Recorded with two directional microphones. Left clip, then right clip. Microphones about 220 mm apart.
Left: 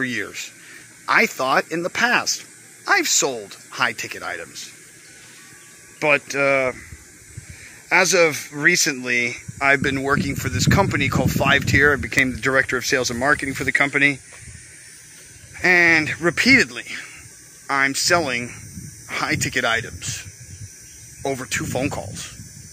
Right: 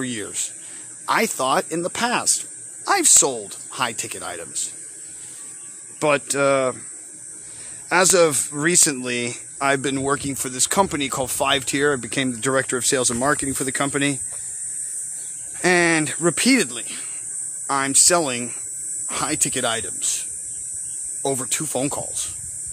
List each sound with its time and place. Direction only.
0.0 s speech: 5° right (ahead or behind)
5.9 s speech: 20° right (ahead or behind)
7.9 s speech: 20° right (ahead or behind)
15.5 s speech: 15° right (ahead or behind)